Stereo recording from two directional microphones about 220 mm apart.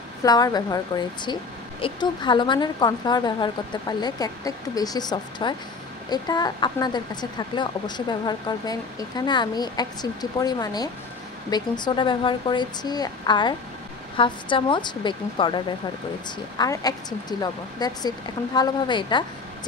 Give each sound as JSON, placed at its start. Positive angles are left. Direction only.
{"t": 0.2, "sound": "a woman's voice", "side_deg": 20}